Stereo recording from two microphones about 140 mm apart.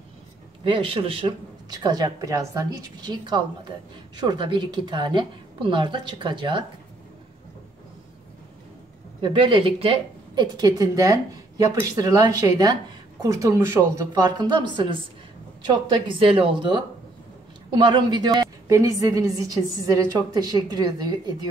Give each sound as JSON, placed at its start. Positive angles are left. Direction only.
{"t": 0.7, "sound": "a woman's voice", "side_deg": -40}
{"t": 9.2, "sound": "a woman's voice", "side_deg": -35}